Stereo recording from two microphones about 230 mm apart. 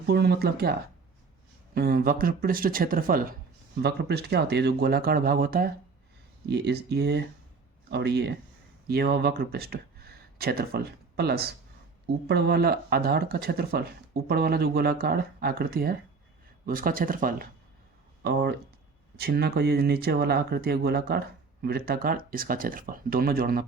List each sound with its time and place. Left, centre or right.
0.1 s speech: right